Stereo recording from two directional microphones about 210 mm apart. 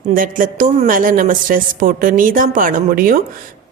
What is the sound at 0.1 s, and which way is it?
A woman's voice, 40° right (ahead or behind).